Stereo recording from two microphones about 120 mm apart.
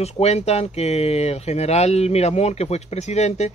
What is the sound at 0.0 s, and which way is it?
Speech, 65° left (ahead or behind).